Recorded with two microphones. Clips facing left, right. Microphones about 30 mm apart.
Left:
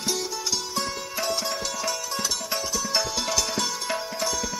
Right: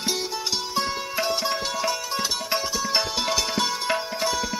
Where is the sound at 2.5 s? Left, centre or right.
Right.